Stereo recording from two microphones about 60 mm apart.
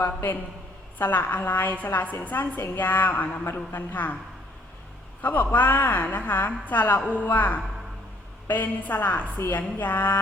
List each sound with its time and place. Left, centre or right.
0.0 s a woman's voice: left
5.2 s a woman's voice: left